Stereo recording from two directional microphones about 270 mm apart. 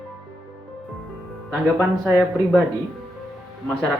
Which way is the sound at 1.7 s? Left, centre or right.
Centre.